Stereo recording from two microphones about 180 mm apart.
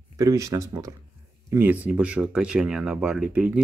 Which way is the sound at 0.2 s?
20° right (ahead or behind).